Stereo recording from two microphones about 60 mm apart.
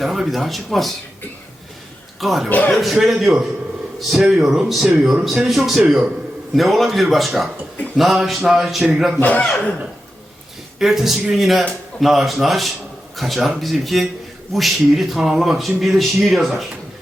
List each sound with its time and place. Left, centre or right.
0.0 s speech: centre
2.2 s speech: centre
2.5 s speech: left
2.7 s speech: centre
9.2 s speech: left
10.8 s speech: centre